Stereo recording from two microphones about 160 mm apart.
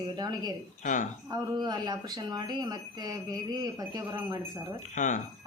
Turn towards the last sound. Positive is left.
turn(degrees=50)  # may be behind; listen again after turning